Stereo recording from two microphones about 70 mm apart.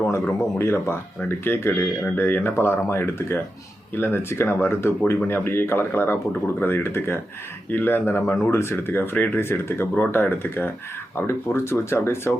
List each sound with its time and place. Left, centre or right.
0.1 s speech: left